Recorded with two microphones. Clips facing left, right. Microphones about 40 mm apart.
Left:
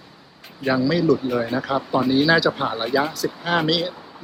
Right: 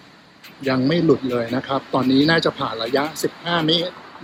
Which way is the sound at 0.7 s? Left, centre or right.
Centre.